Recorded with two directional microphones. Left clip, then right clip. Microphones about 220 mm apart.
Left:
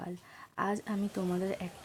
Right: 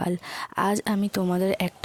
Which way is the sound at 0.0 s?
45° right (ahead or behind).